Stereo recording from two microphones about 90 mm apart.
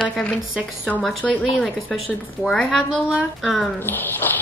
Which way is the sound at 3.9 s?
20° left (ahead or behind).